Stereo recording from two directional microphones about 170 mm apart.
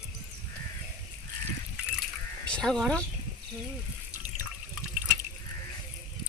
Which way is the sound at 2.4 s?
5° left (ahead or behind).